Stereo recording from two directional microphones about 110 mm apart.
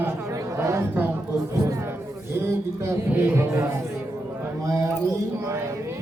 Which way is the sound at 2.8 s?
25° right (ahead or behind).